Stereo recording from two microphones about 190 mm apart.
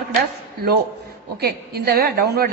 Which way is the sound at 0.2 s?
55° right (ahead or behind).